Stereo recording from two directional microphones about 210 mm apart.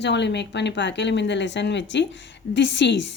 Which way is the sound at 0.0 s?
55° left (ahead or behind).